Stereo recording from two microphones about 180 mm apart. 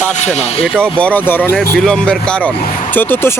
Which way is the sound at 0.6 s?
5° left (ahead or behind).